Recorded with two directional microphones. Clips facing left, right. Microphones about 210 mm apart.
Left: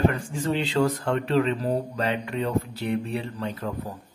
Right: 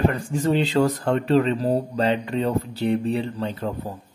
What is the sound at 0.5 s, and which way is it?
Speech, 40° right (ahead or behind).